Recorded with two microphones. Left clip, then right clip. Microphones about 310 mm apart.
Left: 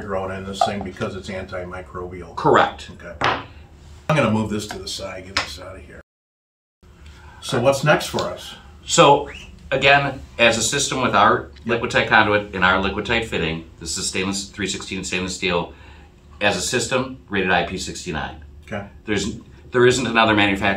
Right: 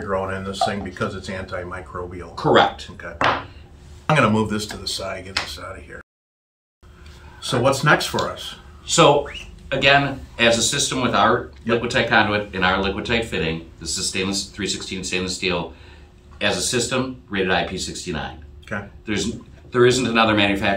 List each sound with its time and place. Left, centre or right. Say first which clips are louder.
0.1 s speech: right 2 dB; centre
2.3 s speech: even; centre
4.1 s speech: right 2 dB; centre
7.4 s speech: even; centre
8.8 s speech: left 1 dB; centre
19.7 s speech: left 1 dB; centre